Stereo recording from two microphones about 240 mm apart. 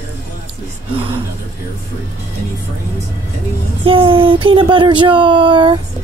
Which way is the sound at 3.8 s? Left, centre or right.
Right.